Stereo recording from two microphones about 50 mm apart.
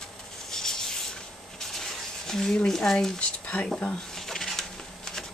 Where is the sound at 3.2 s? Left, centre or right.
Left.